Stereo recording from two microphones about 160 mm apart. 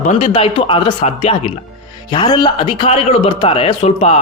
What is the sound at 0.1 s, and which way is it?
Speech, 40° left (ahead or behind).